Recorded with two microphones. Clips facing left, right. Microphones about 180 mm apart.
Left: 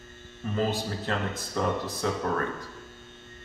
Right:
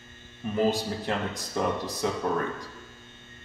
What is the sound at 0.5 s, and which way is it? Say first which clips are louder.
Speech: right 3 dB; 15° right (ahead or behind).